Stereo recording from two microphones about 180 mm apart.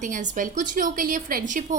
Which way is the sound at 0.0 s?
45° right (ahead or behind).